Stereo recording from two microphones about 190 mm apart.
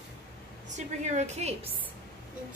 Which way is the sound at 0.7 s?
35° right (ahead or behind).